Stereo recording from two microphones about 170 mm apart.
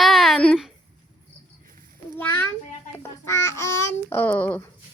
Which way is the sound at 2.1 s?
10° left (ahead or behind).